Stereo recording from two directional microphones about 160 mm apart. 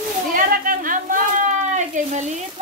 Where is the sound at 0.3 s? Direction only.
60° right (ahead or behind).